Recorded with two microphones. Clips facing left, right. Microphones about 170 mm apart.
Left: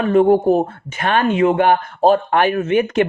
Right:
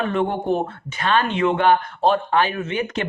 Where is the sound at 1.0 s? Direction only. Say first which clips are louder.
Left 4 dB; 50° left (ahead or behind).